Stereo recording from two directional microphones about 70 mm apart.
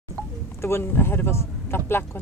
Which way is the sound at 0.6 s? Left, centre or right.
Left.